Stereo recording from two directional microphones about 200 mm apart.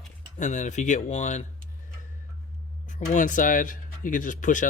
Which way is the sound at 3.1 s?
40° left (ahead or behind).